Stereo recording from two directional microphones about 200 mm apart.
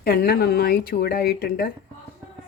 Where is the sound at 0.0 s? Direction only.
50° left (ahead or behind).